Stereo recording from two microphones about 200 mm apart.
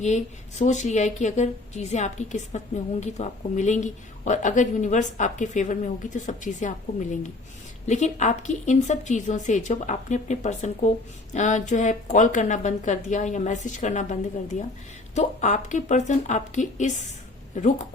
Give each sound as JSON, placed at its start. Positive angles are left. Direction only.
{"t": 0.0, "sound": "a woman's voice", "side_deg": 35}